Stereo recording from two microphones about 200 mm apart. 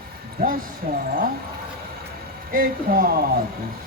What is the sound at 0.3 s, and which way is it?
Speech, 45° right (ahead or behind).